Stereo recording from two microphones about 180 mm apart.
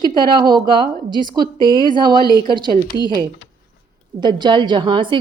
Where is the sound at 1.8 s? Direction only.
25° right (ahead or behind).